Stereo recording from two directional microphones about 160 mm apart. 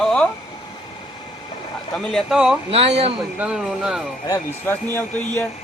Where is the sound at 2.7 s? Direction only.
40° right (ahead or behind).